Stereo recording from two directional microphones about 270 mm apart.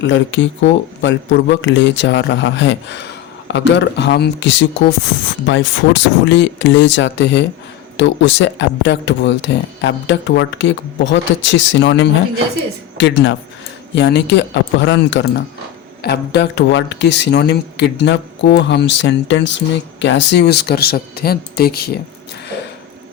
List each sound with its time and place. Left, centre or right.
0.0 s speech: left